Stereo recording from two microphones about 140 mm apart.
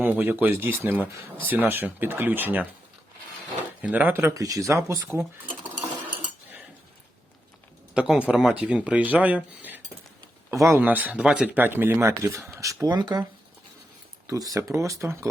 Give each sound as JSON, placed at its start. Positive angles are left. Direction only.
{"t": 0.0, "sound": "speech", "side_deg": -15}
{"t": 3.8, "sound": "speech", "side_deg": -10}
{"t": 7.9, "sound": "speech", "side_deg": -5}
{"t": 14.3, "sound": "speech", "side_deg": -25}